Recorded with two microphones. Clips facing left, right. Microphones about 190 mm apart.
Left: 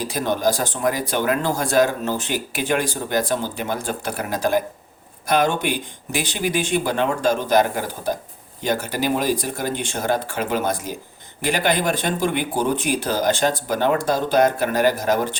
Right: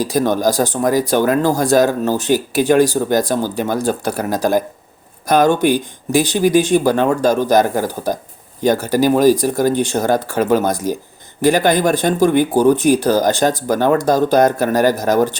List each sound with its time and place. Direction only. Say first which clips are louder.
0.0 s speech: right 6 dB; 40° right (ahead or behind)